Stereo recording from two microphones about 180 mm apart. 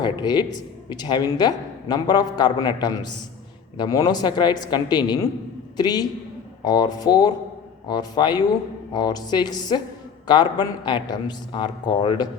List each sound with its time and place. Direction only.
0.0 s speech: 25° left (ahead or behind)